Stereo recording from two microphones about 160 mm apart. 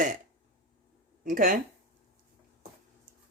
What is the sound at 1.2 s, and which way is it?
Speech, 60° right (ahead or behind).